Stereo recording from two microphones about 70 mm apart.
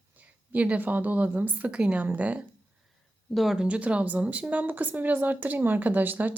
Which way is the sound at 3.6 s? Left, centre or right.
Centre.